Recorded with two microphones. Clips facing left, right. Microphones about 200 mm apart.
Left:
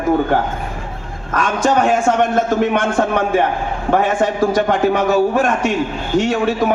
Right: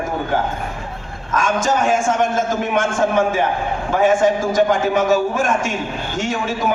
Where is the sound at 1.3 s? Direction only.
60° left (ahead or behind).